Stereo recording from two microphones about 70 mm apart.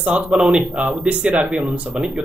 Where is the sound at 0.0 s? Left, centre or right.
Centre.